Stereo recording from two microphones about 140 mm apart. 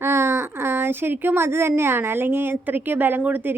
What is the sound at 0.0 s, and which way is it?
Speech, 20° right (ahead or behind).